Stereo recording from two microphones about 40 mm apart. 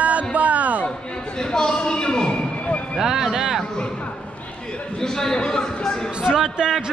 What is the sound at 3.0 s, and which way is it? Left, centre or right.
Speech, centre.